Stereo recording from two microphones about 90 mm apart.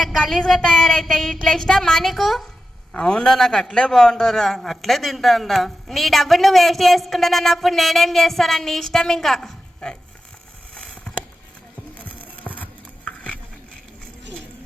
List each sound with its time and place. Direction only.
0.0 s a man's voice: centre (ahead or behind)
11.9 s music: 15° left (ahead or behind)